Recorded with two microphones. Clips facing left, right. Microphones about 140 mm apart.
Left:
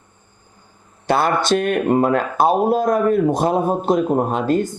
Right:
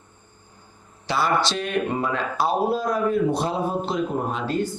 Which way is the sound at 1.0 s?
55° left (ahead or behind).